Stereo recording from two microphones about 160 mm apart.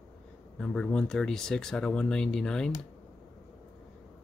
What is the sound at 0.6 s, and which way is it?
Speech, 5° left (ahead or behind).